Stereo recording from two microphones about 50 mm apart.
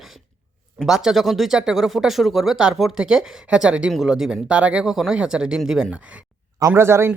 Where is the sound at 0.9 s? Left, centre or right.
Centre.